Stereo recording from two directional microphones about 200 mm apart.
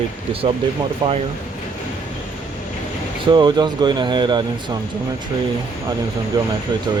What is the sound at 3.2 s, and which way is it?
Speech, 20° right (ahead or behind).